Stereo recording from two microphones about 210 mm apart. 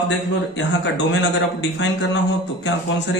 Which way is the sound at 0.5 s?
60° left (ahead or behind).